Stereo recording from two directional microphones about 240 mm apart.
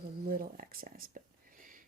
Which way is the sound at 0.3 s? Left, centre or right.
Right.